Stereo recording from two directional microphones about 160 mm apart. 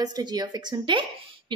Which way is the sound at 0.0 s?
25° right (ahead or behind).